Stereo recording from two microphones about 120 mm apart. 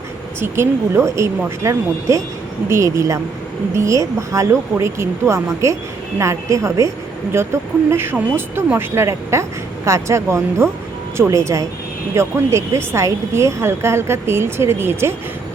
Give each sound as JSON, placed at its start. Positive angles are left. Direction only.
{"t": 0.3, "sound": "a woman's voice", "side_deg": -20}